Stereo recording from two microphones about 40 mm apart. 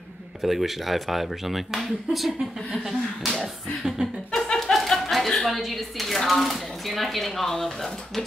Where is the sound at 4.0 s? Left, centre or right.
Right.